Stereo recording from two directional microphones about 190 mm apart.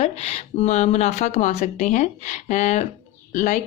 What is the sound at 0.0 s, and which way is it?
Speech, 35° left (ahead or behind).